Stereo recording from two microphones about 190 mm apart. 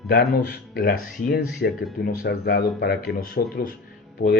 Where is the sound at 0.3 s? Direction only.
65° left (ahead or behind).